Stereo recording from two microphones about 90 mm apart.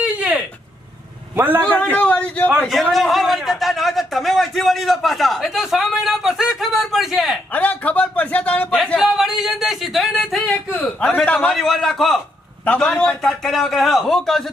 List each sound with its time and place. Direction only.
0.0 s a sound: 15° right (ahead or behind)
1.4 s a man's voice: 25° right (ahead or behind)
1.6 s speech: 15° left (ahead or behind)
2.9 s a man's voice: centre (ahead or behind)
7.5 s a sound: 15° left (ahead or behind)
9.0 s a man's voice: 5° right (ahead or behind)
12.6 s a man's voice: 15° left (ahead or behind)